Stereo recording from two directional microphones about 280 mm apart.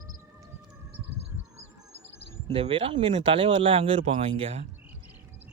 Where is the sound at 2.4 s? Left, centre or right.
Right.